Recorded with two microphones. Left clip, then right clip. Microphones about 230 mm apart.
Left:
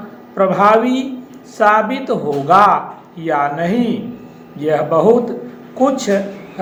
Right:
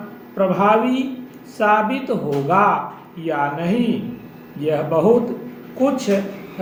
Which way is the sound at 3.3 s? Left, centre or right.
Centre.